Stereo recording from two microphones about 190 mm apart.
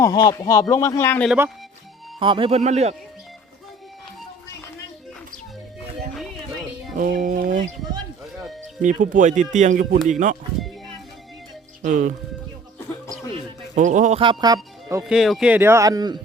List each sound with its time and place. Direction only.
0.0 s speech: 20° left (ahead or behind)
2.1 s speech: 25° right (ahead or behind)
6.9 s speech: 45° right (ahead or behind)
8.8 s speech: 45° right (ahead or behind)
11.8 s speech: 45° right (ahead or behind)
13.7 s speech: 40° right (ahead or behind)
14.2 s speech: 25° right (ahead or behind)
15.0 s speech: centre (ahead or behind); by 16.1 s 20° right (ahead or behind)